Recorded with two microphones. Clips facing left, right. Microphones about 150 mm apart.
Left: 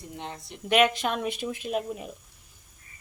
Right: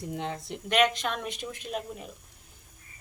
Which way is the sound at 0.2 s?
90° right.